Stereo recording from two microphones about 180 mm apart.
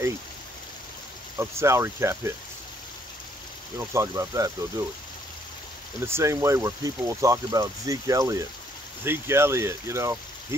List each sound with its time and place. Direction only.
1.4 s speech: 15° right (ahead or behind)
3.7 s speech: 15° right (ahead or behind)
5.9 s speech: 15° right (ahead or behind)